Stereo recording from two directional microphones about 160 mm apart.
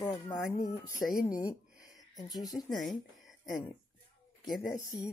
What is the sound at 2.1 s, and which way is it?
Speech, 25° left (ahead or behind).